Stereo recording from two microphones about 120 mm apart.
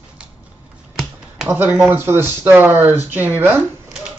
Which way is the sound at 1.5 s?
15° right (ahead or behind).